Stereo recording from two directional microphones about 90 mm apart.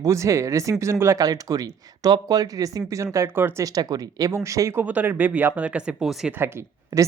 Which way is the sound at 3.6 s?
40° right (ahead or behind).